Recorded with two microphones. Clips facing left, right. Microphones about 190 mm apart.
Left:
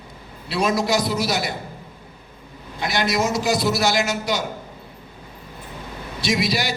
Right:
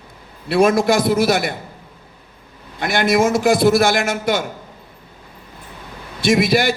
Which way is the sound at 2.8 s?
55° right (ahead or behind).